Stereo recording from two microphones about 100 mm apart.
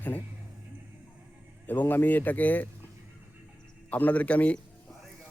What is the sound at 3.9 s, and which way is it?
Speech, 15° left (ahead or behind).